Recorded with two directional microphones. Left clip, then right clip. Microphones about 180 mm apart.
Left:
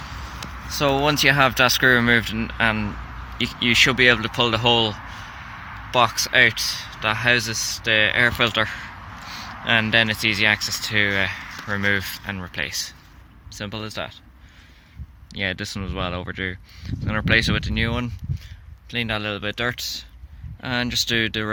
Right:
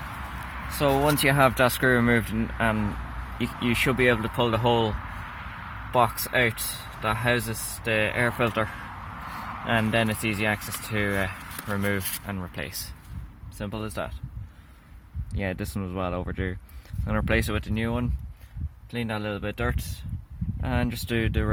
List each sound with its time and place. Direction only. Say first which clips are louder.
0.8 s speech: left 3 dB; 10° left (ahead or behind)
1.0 s speech: left 5 dB; centre (ahead or behind)
15.4 s speech: left 6 dB; 10° right (ahead or behind)